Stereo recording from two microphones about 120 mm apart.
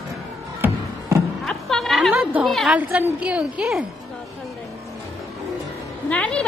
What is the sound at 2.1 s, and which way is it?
Speech, 10° right (ahead or behind).